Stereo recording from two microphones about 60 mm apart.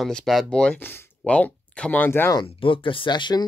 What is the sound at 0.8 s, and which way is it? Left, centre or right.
Speech, left.